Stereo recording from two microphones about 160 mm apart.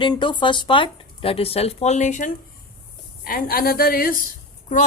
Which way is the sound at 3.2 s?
65° left (ahead or behind).